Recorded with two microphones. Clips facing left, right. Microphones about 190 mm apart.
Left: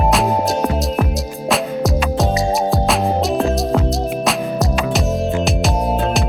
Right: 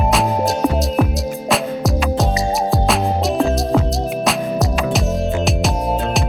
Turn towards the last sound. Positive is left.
turn(degrees=0)  # may be behind; listen again after turning